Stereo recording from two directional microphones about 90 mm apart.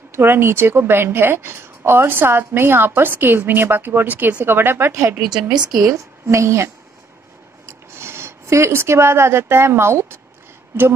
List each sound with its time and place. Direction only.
0.1 s a woman's voice: 25° right (ahead or behind)
5.5 s a woman's voice: 45° right (ahead or behind)
5.9 s a woman's voice: 35° right (ahead or behind)